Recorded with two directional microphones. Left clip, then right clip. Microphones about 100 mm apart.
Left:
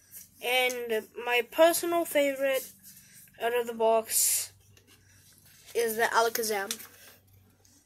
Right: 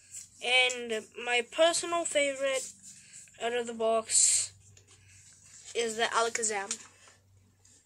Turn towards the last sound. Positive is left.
turn(degrees=20)  # may be behind; listen again after turning